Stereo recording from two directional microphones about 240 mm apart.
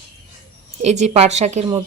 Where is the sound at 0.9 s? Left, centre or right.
Right.